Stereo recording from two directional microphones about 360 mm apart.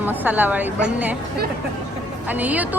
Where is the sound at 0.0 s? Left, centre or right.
Centre.